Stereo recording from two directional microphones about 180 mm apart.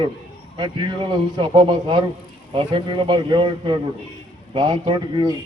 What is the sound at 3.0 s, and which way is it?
Speech, 25° right (ahead or behind).